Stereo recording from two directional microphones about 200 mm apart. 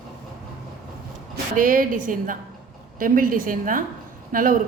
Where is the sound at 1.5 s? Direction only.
45° right (ahead or behind).